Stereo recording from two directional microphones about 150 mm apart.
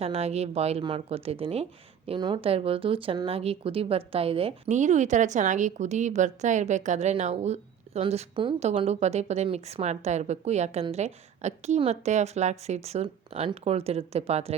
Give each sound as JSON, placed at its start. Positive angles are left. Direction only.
{"t": 0.0, "sound": "speech", "side_deg": -45}
{"t": 2.0, "sound": "speech", "side_deg": -30}